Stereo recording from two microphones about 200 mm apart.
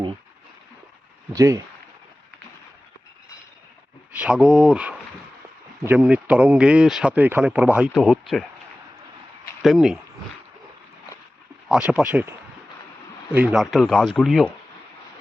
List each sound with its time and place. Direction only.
1.3 s speech: 15° right (ahead or behind)
4.1 s speech: 5° right (ahead or behind)
9.6 s speech: centre (ahead or behind)
11.7 s speech: 5° right (ahead or behind)
13.3 s speech: 5° right (ahead or behind)